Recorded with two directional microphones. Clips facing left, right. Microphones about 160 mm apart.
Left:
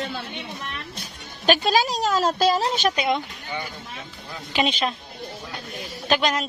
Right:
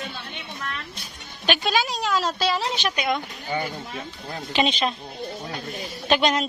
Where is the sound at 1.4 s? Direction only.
40° left (ahead or behind).